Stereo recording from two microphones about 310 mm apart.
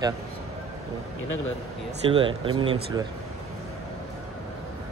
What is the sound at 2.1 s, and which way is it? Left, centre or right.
Speech, centre.